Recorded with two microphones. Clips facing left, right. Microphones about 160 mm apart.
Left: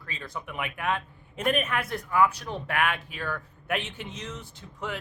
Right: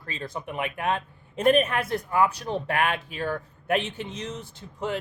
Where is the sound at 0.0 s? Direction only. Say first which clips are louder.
Right 4 dB; 35° right (ahead or behind).